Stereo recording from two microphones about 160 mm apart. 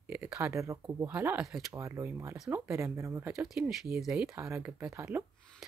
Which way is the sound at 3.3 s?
5° right (ahead or behind).